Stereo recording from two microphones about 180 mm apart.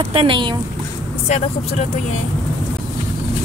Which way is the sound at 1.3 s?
40° left (ahead or behind).